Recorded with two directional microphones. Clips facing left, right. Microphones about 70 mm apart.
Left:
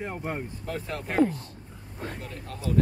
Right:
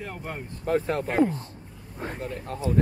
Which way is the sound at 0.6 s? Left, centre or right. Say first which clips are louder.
Right 11 dB; right.